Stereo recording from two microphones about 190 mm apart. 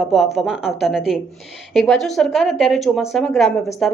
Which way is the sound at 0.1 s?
Centre (ahead or behind).